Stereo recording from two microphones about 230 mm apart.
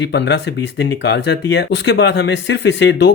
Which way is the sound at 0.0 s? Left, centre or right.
Left.